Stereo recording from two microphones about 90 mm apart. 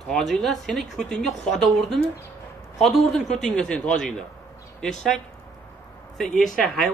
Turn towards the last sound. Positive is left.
turn(degrees=0)  # may be behind; listen again after turning